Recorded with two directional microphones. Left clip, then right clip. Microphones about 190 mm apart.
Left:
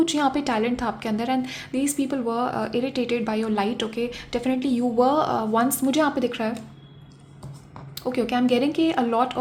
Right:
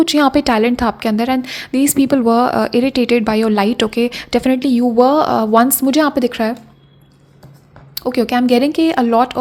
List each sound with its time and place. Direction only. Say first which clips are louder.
0.0 s a woman's voice: right 9 dB; 35° right (ahead or behind)
7.9 s a woman's voice: right 8 dB; 35° right (ahead or behind)